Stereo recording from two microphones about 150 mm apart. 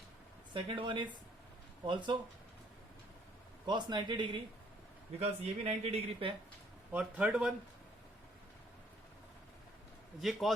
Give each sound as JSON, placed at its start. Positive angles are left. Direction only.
{"t": 0.5, "sound": "a man's voice", "side_deg": -35}
{"t": 3.7, "sound": "a man's voice", "side_deg": -30}
{"t": 5.2, "sound": "speech", "side_deg": -45}
{"t": 6.9, "sound": "a man's voice", "side_deg": -5}
{"t": 10.2, "sound": "a man's voice", "side_deg": 0}